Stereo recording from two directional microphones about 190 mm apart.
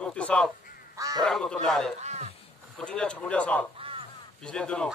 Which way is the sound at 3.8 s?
30° right (ahead or behind).